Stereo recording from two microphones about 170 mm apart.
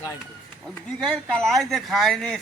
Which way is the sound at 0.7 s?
5° left (ahead or behind).